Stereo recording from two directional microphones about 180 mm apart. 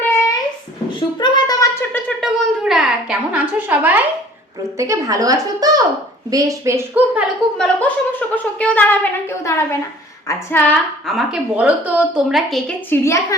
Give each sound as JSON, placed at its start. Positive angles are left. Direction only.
{"t": 0.9, "sound": "a sound", "side_deg": 25}
{"t": 2.0, "sound": "a woman's voice", "side_deg": 0}
{"t": 11.0, "sound": "speech", "side_deg": 0}
{"t": 12.9, "sound": "a woman's voice", "side_deg": 15}